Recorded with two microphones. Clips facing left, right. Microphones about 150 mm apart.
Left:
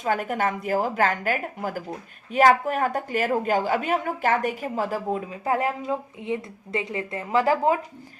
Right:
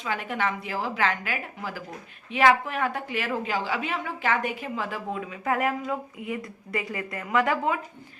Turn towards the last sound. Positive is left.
turn(degrees=35)  # may be behind; listen again after turning